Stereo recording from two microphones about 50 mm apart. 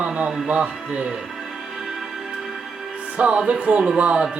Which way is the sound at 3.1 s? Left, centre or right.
Right.